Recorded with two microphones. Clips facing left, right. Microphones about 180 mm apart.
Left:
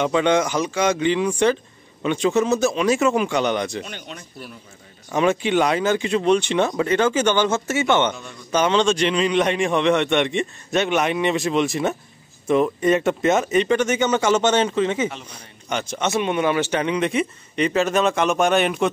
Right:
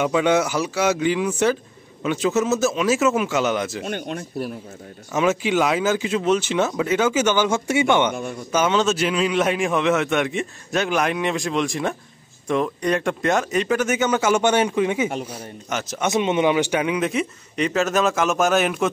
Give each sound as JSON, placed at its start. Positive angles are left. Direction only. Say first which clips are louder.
{"t": 0.0, "sound": "a man's voice", "louder": "even", "side_deg": -5}
{"t": 3.8, "sound": "speech", "louder": "right 8 dB", "side_deg": -50}
{"t": 5.1, "sound": "a man's voice", "louder": "left 1 dB", "side_deg": -5}
{"t": 16.1, "sound": "a man's voice", "louder": "right 2 dB", "side_deg": -20}